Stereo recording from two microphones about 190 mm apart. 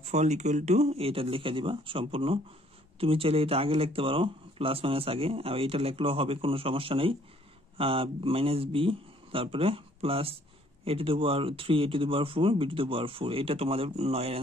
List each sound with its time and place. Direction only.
0.0 s speech: 35° right (ahead or behind)